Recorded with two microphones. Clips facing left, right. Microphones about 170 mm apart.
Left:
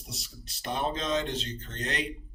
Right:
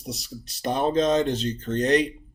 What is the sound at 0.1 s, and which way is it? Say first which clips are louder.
Speech: right 10 dB; 40° right (ahead or behind).